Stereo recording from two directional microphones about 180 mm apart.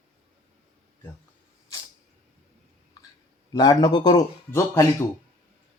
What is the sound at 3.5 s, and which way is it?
Speech, 20° left (ahead or behind).